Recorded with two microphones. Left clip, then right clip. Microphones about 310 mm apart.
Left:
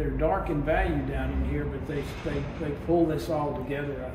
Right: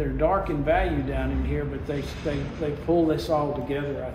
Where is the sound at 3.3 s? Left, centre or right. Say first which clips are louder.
Right 5 dB; right.